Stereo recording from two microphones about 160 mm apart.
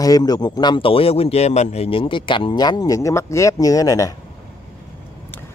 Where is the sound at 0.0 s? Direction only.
25° left (ahead or behind).